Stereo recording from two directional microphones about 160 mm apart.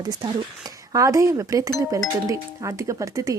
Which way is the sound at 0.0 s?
25° right (ahead or behind).